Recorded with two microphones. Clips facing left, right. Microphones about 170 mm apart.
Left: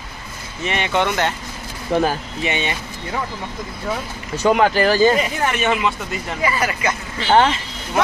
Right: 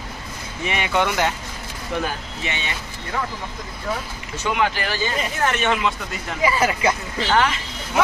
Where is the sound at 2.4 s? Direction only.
20° left (ahead or behind).